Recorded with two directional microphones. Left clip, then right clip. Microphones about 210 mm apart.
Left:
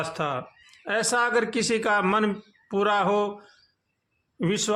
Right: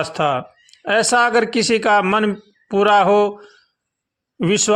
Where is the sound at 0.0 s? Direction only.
25° right (ahead or behind).